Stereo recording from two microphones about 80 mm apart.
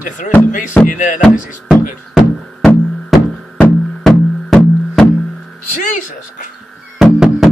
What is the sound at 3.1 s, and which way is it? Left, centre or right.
Music, centre.